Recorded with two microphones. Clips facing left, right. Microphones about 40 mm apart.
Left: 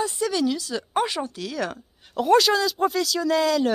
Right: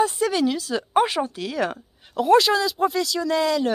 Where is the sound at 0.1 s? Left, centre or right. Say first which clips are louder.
Right 2 dB; right.